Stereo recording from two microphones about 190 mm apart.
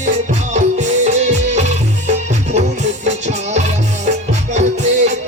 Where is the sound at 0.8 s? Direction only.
40° right (ahead or behind).